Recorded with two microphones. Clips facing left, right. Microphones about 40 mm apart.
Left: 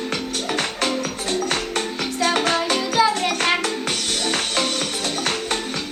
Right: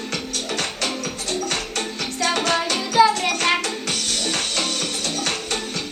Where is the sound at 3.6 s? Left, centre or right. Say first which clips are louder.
Left 2 dB; centre.